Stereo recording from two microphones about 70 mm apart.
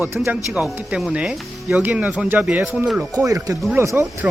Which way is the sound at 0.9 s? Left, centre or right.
Centre.